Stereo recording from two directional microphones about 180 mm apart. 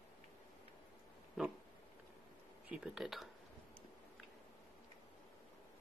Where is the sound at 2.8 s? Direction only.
Centre (ahead or behind).